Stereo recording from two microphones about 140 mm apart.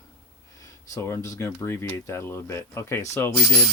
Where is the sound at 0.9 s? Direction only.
20° left (ahead or behind).